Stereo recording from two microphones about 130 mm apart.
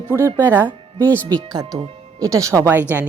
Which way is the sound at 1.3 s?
35° right (ahead or behind).